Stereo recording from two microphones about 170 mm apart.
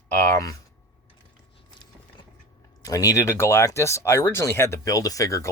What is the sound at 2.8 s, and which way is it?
Speech, 20° left (ahead or behind).